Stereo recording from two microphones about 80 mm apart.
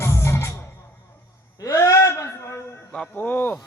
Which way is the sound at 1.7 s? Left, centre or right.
Left.